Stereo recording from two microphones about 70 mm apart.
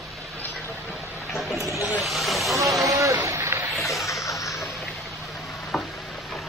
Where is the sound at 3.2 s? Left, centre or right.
Right.